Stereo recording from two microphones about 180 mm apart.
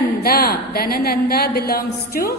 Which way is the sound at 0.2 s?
55° left (ahead or behind).